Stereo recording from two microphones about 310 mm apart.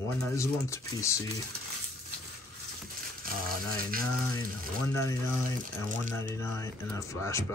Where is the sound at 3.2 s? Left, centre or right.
Right.